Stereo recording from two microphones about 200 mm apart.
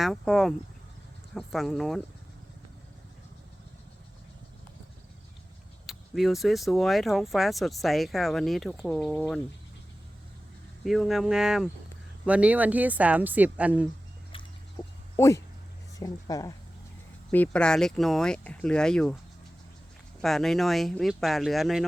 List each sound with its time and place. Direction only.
0.0 s speech: centre (ahead or behind)
5.8 s speech: centre (ahead or behind)
10.8 s speech: centre (ahead or behind)
14.8 s a sound: 15° left (ahead or behind)
16.0 s speech: 20° left (ahead or behind)
17.3 s speech: 5° left (ahead or behind)
20.2 s speech: centre (ahead or behind)